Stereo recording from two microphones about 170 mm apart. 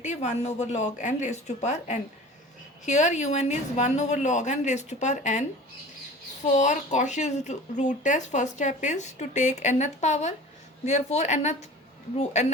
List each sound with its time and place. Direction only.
0.0 s speech: 45° left (ahead or behind)